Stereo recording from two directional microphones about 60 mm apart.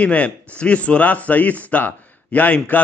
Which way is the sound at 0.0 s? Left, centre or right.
Left.